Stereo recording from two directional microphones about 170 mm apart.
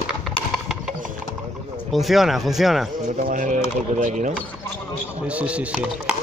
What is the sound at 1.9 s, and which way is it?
Speech, centre (ahead or behind).